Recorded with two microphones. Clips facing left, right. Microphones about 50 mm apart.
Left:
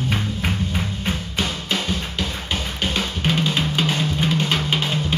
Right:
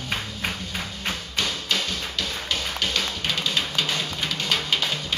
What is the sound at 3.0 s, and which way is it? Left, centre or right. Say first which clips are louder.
Drum: left 5 dB; left.